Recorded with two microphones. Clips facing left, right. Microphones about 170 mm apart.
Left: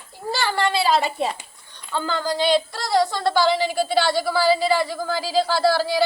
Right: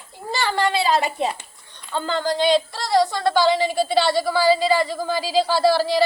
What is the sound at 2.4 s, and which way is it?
Speech, 15° right (ahead or behind).